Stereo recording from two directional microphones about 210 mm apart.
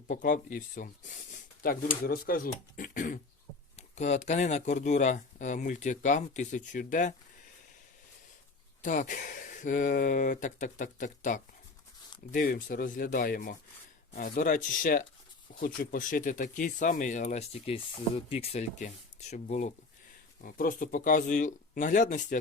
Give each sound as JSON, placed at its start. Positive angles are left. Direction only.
{"t": 0.1, "sound": "speech", "side_deg": 40}
{"t": 8.8, "sound": "speech", "side_deg": 40}